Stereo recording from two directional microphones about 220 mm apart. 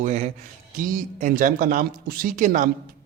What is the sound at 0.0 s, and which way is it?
Speech, 35° right (ahead or behind).